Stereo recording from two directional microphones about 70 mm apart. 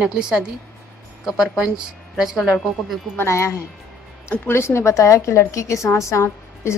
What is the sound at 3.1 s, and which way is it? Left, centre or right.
A woman's voice, left.